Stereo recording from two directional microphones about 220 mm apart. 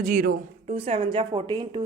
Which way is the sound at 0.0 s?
40° right (ahead or behind).